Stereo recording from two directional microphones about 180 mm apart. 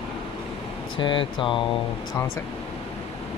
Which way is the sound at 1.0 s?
25° left (ahead or behind).